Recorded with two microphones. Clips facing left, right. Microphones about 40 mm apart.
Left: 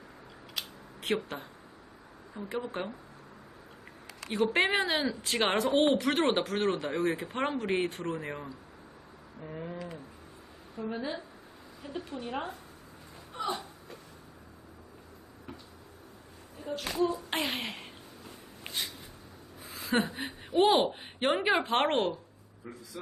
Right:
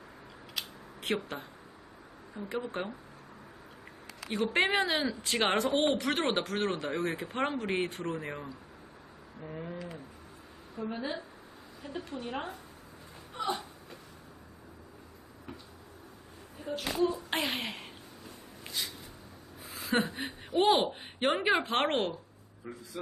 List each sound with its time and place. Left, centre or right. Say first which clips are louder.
0.6 s scissors: even; centre
1.0 s speech: left 1 dB; centre
4.2 s cat: left 3 dB; centre
4.5 s speech: right 2 dB; centre
13.3 s a sound: even; centre
16.6 s speech: even; centre
18.6 s a sound: left 1 dB; left
19.6 s a woman's voice: left 1 dB; centre